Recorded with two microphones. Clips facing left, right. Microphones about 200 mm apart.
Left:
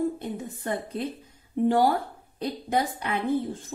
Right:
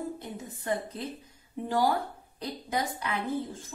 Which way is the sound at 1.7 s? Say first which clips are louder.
Left 5 dB; 60° left (ahead or behind).